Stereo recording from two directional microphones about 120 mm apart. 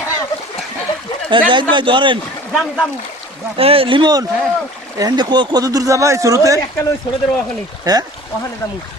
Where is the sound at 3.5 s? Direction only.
50° right (ahead or behind); by 6.6 s 25° right (ahead or behind).